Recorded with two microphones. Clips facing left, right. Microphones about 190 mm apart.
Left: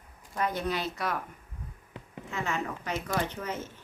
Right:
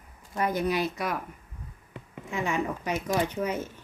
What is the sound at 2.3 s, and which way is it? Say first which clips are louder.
Speech: right 4 dB; 15° right (ahead or behind).